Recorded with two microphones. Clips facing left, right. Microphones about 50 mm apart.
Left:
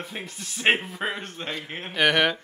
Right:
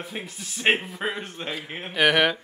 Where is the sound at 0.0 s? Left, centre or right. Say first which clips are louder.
Right 1 dB; centre.